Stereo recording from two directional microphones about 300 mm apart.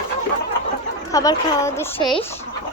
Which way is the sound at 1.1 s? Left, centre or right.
Centre.